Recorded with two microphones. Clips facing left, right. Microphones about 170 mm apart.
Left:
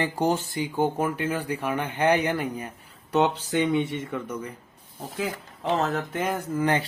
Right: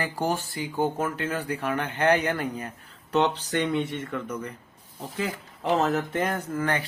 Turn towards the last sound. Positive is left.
turn(degrees=10)  # may be behind; listen again after turning